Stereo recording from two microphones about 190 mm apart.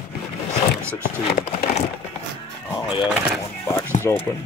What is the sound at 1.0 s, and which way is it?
Speech, 45° left (ahead or behind).